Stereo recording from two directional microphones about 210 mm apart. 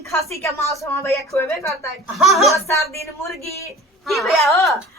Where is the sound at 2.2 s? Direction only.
Centre (ahead or behind).